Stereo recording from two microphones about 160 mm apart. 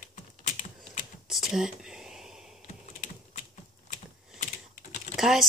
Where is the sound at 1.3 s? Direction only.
5° right (ahead or behind).